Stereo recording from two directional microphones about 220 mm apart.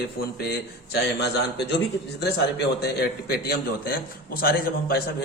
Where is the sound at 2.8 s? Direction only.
45° left (ahead or behind).